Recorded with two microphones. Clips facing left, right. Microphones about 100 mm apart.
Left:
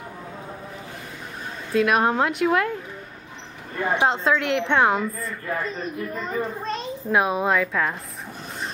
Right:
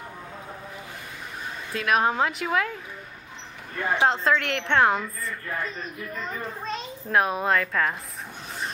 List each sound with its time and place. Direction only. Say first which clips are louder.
1.7 s a child's voice: left 4 dB; centre (ahead or behind)
3.7 s speech: left 1 dB; 15° left (ahead or behind)
4.1 s a child's voice: left 2 dB; centre (ahead or behind)